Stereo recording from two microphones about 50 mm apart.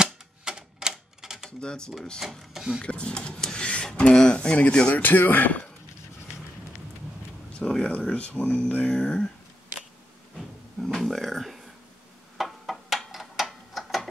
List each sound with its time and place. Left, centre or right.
0.0 s typewriter: centre
1.6 s speech: centre
2.1 s speech: centre
2.8 s speech: centre
5.0 s speech: left
7.5 s speech: left
10.3 s a sound: centre